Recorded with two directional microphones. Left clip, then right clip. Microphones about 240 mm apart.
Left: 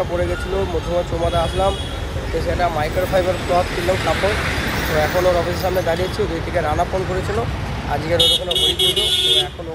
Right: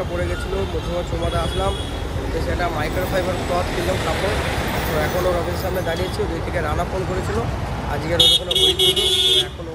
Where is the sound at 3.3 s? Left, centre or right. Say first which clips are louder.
Left 4 dB; right.